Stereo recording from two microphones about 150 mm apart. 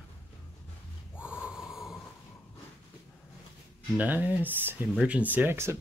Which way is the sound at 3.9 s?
10° right (ahead or behind).